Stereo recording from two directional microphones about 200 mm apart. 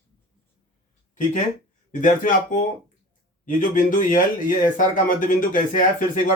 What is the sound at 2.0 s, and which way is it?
Speech, 40° left (ahead or behind).